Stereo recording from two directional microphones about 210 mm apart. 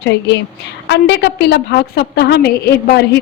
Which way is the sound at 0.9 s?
55° left (ahead or behind).